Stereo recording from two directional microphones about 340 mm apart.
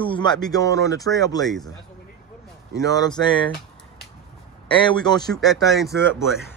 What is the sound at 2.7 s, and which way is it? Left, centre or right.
Speech, centre.